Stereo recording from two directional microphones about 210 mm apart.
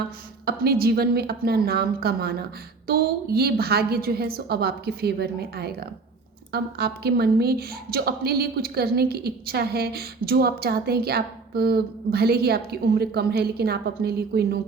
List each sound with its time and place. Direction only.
0.4 s a woman's voice: 45° right (ahead or behind)